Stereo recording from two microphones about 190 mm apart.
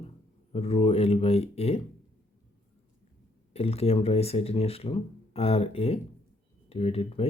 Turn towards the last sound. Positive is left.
turn(degrees=30)  # may be behind; listen again after turning